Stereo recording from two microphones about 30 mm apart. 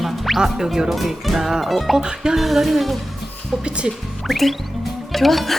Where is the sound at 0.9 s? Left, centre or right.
Centre.